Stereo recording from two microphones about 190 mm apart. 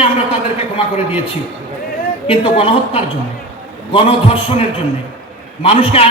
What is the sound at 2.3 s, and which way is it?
A man's voice, 30° left (ahead or behind).